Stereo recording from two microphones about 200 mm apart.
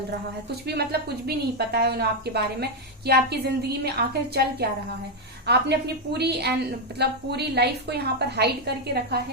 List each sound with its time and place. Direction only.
0.7 s a woman's voice: 50° right (ahead or behind)
5.5 s a woman's voice: 55° right (ahead or behind)